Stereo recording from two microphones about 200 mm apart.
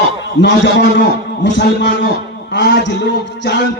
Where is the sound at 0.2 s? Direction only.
60° left (ahead or behind).